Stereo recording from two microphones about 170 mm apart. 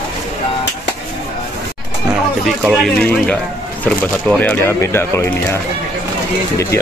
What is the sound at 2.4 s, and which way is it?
Speech, centre (ahead or behind).